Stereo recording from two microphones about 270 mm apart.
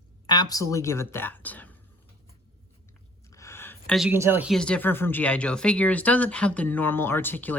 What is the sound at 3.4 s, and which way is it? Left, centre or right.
Speech, centre.